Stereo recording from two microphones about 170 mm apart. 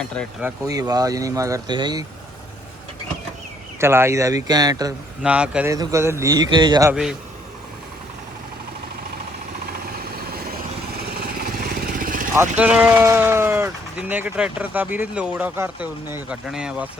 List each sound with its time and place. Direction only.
0.1 s speech: 5° left (ahead or behind)
0.6 s speech: 20° right (ahead or behind)
3.8 s speech: 15° right (ahead or behind)
5.2 s speech: 5° right (ahead or behind)
5.7 s speech: 20° right (ahead or behind)
6.9 s speech: 5° right (ahead or behind)
11.1 s vehicle: 65° right (ahead or behind)
12.3 s speech: 10° right (ahead or behind)